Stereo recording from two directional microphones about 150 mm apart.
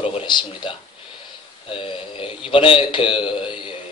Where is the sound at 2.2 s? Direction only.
35° left (ahead or behind).